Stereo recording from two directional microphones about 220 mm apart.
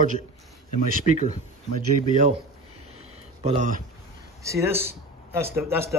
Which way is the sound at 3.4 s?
30° right (ahead or behind).